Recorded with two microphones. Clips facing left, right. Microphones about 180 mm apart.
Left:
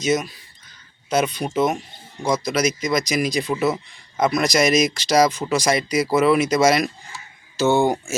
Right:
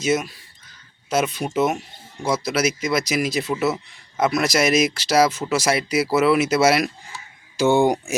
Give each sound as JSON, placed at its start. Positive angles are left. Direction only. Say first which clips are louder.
{"t": 0.0, "sound": "speech", "louder": "even", "side_deg": -5}